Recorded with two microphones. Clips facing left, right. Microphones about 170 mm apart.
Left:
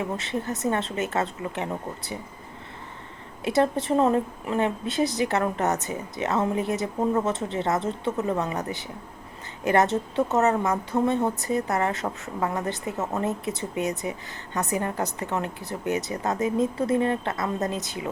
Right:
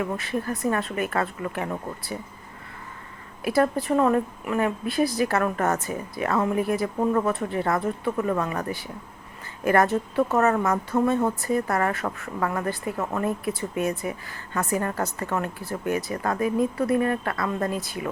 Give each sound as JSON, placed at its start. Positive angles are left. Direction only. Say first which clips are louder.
{"t": 0.0, "sound": "speech", "louder": "right 1 dB", "side_deg": 20}
{"t": 3.4, "sound": "speech", "louder": "even", "side_deg": 25}